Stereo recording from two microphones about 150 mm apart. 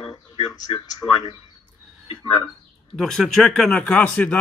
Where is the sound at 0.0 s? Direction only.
25° left (ahead or behind).